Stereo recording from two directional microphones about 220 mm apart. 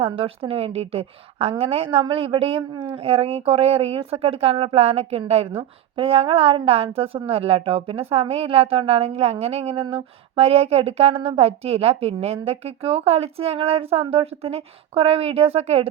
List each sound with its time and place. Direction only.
0.0 s a woman's voice: 25° right (ahead or behind)